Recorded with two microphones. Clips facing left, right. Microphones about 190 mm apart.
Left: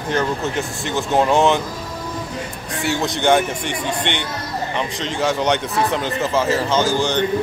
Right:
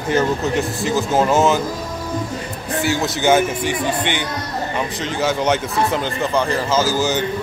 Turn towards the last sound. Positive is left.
turn(degrees=-5)  # may be behind; listen again after turning